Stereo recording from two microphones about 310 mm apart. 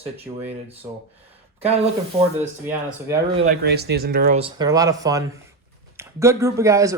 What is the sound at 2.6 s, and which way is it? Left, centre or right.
Speech, centre.